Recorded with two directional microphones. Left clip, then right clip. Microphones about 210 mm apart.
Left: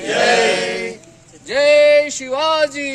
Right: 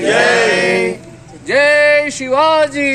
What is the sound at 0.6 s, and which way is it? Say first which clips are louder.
Speech: right 8 dB; 45° right (ahead or behind).